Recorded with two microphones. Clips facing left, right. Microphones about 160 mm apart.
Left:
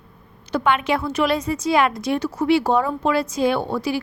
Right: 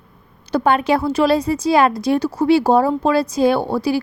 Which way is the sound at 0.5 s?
35° right (ahead or behind).